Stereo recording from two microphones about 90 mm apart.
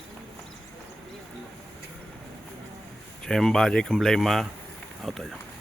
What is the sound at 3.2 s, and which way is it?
Speech, 5° left (ahead or behind).